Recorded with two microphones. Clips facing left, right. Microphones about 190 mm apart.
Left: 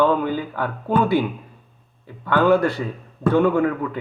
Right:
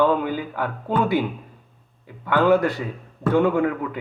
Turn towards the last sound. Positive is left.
turn(degrees=-20)  # may be behind; listen again after turning